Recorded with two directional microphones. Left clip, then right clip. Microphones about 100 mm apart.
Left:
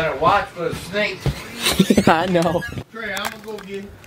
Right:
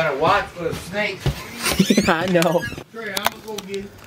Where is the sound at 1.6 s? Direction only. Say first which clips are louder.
Left 2 dB; 15° left (ahead or behind).